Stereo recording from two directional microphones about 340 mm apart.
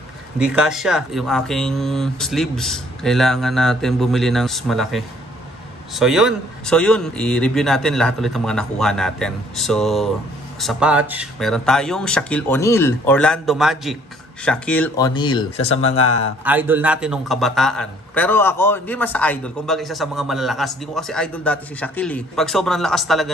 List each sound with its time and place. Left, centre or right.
0.4 s a man's voice: centre
15.7 s speech: left
16.4 s a man's voice: centre